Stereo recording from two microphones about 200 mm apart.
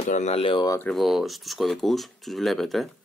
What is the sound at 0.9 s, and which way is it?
Speech, centre (ahead or behind).